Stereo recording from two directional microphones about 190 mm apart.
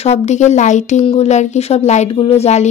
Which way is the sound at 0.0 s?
35° left (ahead or behind).